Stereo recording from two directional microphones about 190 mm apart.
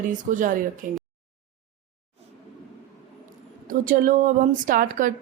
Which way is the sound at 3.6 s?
45° right (ahead or behind).